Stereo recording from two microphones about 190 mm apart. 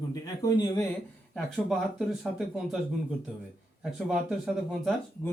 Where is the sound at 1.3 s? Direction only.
Centre (ahead or behind).